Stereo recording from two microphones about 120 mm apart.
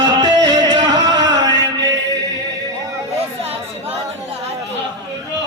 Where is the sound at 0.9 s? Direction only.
30° right (ahead or behind).